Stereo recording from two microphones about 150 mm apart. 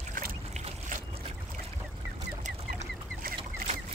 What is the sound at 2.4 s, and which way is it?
Chicken, 55° right (ahead or behind).